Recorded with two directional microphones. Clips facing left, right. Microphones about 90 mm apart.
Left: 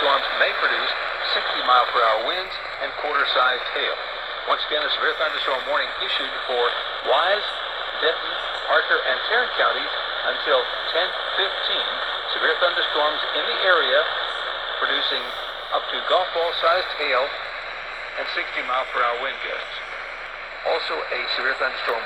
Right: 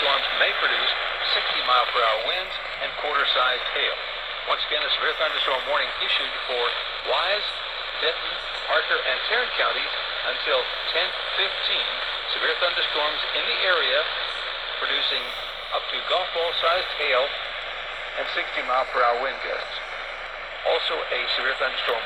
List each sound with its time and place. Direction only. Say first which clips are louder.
0.0 s radio: left 4 dB; 25° left (ahead or behind)
2.8 s speech: left 2 dB; 15° left (ahead or behind)
6.5 s speech: left 5 dB; 35° left (ahead or behind); by 17.2 s 10° left (ahead or behind)
18.2 s speech: even; centre (ahead or behind)
20.7 s speech: even; 10° left (ahead or behind)